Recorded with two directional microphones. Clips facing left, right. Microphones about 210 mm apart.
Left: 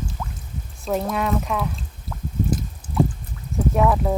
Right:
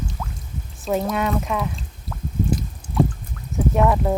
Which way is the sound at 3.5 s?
Centre (ahead or behind).